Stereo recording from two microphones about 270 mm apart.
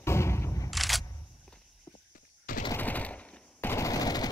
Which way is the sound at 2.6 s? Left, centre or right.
Centre.